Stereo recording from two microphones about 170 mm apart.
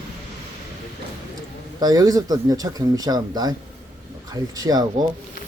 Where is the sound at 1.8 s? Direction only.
20° right (ahead or behind).